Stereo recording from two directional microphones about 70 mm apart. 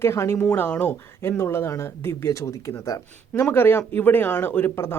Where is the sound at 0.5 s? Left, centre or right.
Left.